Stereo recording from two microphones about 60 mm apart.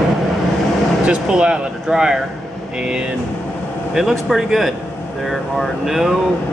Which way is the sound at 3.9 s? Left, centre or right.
Centre.